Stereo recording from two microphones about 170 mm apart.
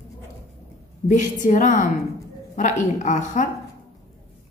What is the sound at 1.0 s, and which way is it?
A woman's voice, 45° left (ahead or behind).